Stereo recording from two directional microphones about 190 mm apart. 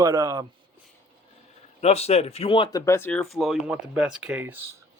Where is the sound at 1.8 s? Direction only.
35° left (ahead or behind).